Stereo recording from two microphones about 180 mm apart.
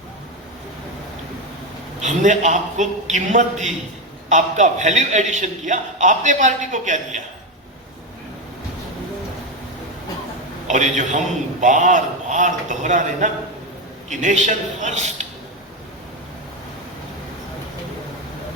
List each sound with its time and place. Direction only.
2.0 s a man's voice: 45° right (ahead or behind)
10.7 s a man's voice: 40° right (ahead or behind)